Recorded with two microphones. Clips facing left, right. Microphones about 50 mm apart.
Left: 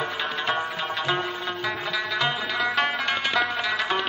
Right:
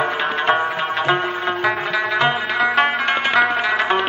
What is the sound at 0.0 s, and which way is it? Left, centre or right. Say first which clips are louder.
Music: right 8 dB; right.